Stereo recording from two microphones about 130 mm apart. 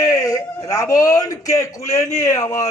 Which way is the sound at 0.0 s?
25° left (ahead or behind).